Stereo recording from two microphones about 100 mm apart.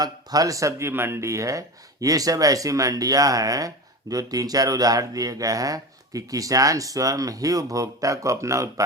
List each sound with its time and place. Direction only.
0.0 s speech: 40° right (ahead or behind)